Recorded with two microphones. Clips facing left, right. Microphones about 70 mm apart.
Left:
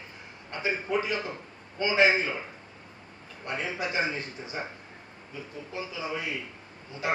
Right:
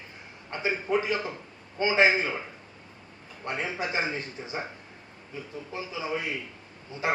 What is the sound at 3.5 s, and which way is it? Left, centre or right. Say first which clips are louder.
A man's voice: even; right.